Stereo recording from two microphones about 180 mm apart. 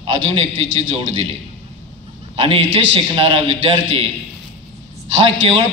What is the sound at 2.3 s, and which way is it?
A man's voice, 30° right (ahead or behind).